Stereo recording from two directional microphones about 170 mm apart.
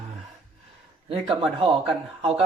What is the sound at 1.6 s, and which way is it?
Speech, 30° right (ahead or behind).